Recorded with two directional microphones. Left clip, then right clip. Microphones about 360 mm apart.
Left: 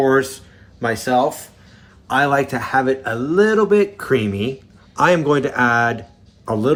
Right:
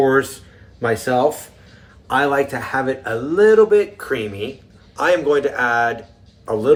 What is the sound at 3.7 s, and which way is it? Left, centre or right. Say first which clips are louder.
A man's voice: left 1 dB; centre.